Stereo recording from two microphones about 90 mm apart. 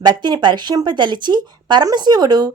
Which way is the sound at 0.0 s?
50° right (ahead or behind).